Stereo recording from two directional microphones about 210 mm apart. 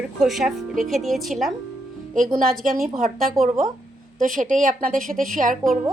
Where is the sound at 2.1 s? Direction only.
40° right (ahead or behind).